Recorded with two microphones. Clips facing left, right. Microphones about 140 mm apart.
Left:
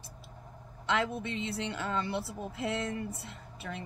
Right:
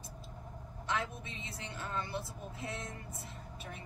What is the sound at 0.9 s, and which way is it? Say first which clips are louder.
A woman's voice: left 7 dB; 80° left.